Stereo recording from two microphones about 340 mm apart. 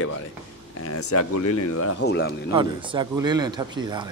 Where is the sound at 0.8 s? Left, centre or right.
Left.